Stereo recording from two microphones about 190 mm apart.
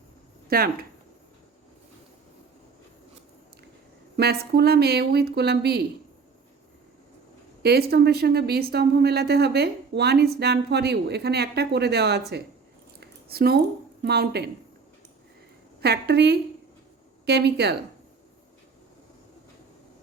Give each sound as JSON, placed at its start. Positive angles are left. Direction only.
{"t": 0.4, "sound": "speech", "side_deg": -55}
{"t": 4.2, "sound": "speech", "side_deg": -55}
{"t": 7.6, "sound": "speech", "side_deg": -55}
{"t": 13.0, "sound": "squish", "side_deg": -55}
{"t": 14.0, "sound": "speech", "side_deg": -60}
{"t": 15.8, "sound": "speech", "side_deg": -60}